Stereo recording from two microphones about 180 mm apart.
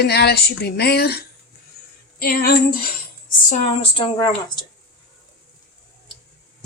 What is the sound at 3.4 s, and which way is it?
Speech, 40° left (ahead or behind).